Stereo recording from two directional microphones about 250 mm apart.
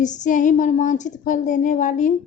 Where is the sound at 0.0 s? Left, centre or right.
Left.